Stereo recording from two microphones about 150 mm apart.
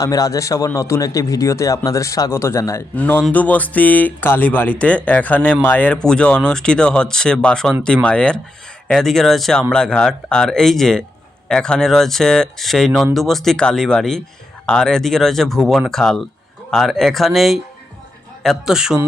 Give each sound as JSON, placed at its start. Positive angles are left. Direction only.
{"t": 0.0, "sound": "a man's voice", "side_deg": 25}